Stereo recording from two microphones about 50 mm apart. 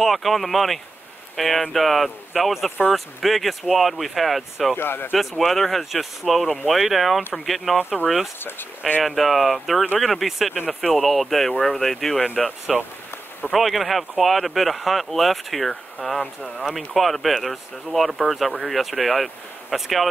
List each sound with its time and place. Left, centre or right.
0.0 s speech: centre
4.7 s speech: left
5.6 s speech: centre
8.5 s speech: left
9.0 s speech: centre